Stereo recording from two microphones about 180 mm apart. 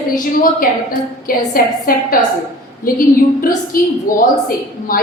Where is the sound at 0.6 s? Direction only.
50° left (ahead or behind).